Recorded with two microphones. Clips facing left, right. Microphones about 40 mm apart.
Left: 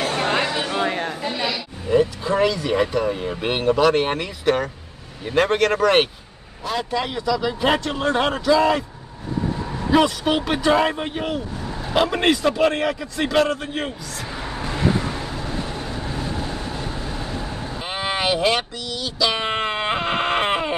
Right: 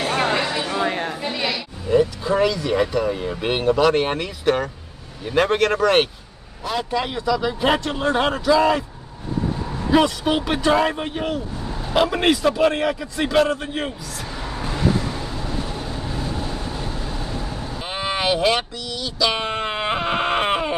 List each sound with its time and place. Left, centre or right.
0.8 s chatter: centre
1.5 s a man's voice: centre
9.8 s a man's voice: centre
14.3 s vehicle: centre
18.9 s a man's voice: centre
19.4 s baby cry: centre